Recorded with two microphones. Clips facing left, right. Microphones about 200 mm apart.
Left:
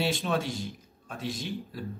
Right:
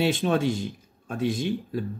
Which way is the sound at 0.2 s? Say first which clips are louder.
Right 6 dB; 55° right (ahead or behind).